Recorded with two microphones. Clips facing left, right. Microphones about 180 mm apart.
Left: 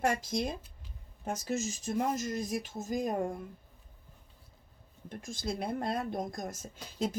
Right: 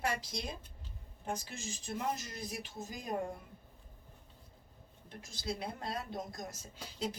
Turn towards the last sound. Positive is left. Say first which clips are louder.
# left 5 dB
turn(degrees=50)  # may be behind; listen again after turning